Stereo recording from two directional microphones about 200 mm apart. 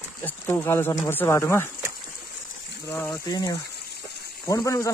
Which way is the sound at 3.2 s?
20° left (ahead or behind).